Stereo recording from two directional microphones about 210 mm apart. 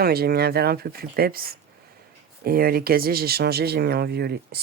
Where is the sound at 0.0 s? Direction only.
50° right (ahead or behind).